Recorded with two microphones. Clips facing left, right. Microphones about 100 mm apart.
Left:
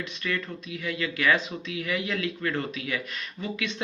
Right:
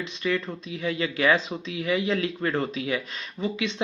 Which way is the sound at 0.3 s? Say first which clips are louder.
Right 5 dB; 25° right (ahead or behind).